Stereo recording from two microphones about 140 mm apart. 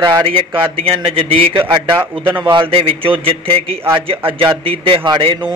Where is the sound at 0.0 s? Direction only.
35° right (ahead or behind).